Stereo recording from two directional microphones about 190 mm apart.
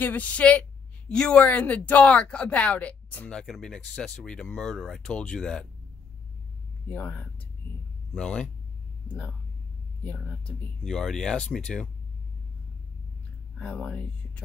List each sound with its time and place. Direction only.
0.0 s speech: 10° left (ahead or behind)
6.9 s speech: 10° left (ahead or behind)
7.6 s vehicle: 10° left (ahead or behind)
8.1 s speech: 5° left (ahead or behind)
10.0 s speech: 5° left (ahead or behind)
13.6 s speech: 5° left (ahead or behind)